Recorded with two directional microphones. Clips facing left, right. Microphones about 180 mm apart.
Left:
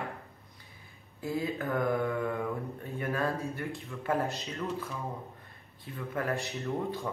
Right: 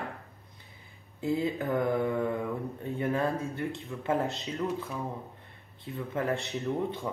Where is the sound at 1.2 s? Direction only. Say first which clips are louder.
Right 4 dB; 20° right (ahead or behind).